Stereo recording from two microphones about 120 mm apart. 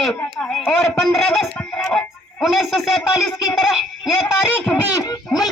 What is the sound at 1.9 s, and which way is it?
Music, centre (ahead or behind).